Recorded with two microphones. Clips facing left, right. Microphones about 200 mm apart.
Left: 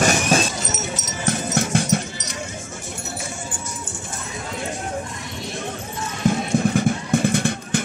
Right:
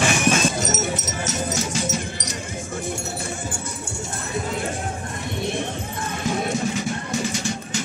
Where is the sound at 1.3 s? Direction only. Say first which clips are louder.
Left 6 dB; 55° left (ahead or behind).